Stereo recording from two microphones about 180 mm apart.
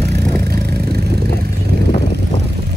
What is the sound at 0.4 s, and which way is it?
Vehicle, 60° right (ahead or behind).